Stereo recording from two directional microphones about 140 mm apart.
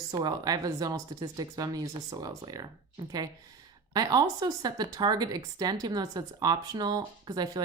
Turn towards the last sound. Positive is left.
turn(degrees=-30)  # may be behind; listen again after turning